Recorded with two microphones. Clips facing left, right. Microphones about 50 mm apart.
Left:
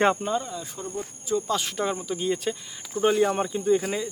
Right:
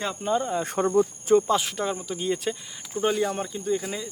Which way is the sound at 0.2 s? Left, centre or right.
Centre.